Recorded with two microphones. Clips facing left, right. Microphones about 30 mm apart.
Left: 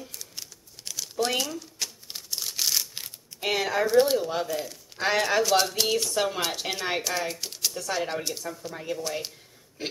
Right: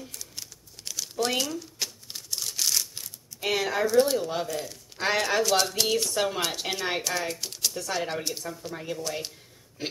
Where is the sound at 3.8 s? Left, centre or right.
Centre.